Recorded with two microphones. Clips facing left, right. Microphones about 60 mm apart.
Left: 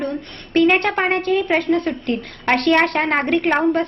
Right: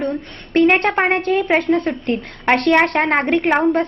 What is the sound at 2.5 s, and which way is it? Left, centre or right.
Speech, centre.